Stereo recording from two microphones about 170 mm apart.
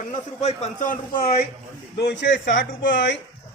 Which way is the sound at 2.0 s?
90° left.